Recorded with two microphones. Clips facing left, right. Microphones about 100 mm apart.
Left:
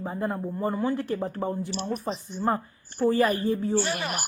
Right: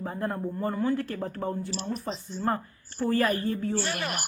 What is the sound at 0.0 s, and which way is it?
Speech, 10° left (ahead or behind).